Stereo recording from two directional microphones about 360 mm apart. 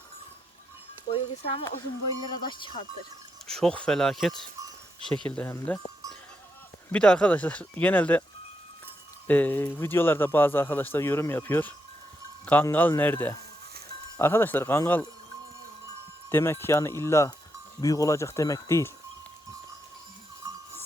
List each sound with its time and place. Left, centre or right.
1.0 s speech: centre
3.4 s speech: centre
6.9 s speech: centre
9.2 s speech: centre
16.3 s speech: centre